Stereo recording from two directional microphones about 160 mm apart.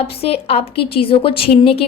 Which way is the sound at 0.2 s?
40° left (ahead or behind).